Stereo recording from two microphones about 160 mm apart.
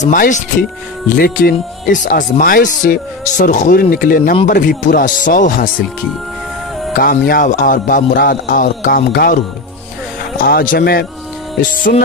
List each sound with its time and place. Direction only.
0.0 s speech: 55° left (ahead or behind)
7.0 s speech: 65° left (ahead or behind)
10.4 s a man's voice: 65° left (ahead or behind)